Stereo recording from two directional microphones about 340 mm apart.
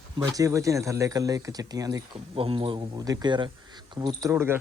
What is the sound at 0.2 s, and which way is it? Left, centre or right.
Speech, centre.